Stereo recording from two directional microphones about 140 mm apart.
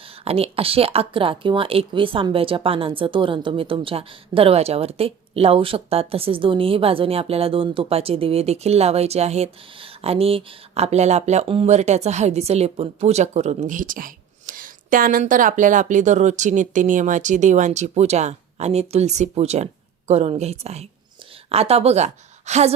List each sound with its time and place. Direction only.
0.3 s speech: 45° right (ahead or behind)